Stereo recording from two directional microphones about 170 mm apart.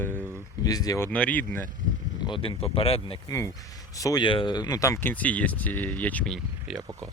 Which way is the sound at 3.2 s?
15° left (ahead or behind).